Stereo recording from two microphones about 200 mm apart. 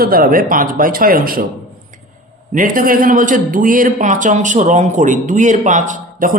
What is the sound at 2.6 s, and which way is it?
A man's voice, 45° right (ahead or behind).